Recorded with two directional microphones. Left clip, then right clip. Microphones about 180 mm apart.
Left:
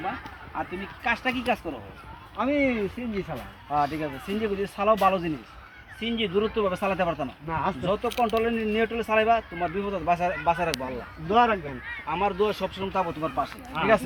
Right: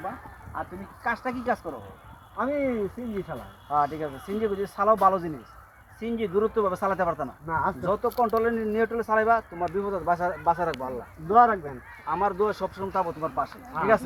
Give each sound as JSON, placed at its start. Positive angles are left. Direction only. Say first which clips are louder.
{"t": 1.0, "sound": "speech", "louder": "left 2 dB", "side_deg": 10}
{"t": 6.0, "sound": "speech", "louder": "left 1 dB", "side_deg": -40}
{"t": 6.3, "sound": "speech", "louder": "right 2 dB", "side_deg": 0}